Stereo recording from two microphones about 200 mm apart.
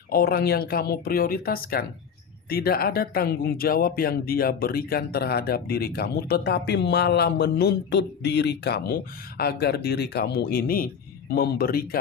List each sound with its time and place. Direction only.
0.1 s speech: 50° left (ahead or behind)